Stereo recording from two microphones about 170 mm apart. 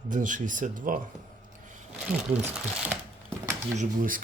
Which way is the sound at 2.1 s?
10° right (ahead or behind).